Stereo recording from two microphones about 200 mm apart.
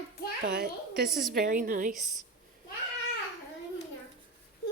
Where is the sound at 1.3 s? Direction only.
45° right (ahead or behind).